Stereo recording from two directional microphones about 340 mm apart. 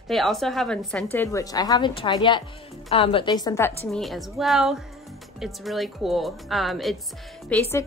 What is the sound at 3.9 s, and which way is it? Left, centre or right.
A woman's voice, centre.